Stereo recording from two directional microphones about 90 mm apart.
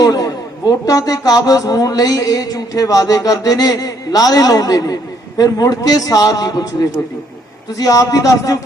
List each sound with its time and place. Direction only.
0.0 s a man's voice: 45° left (ahead or behind)